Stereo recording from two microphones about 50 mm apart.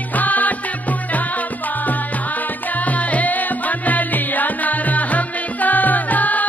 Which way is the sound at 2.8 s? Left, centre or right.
Left.